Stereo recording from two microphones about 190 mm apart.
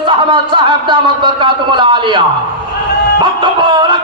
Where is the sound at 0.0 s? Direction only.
25° right (ahead or behind).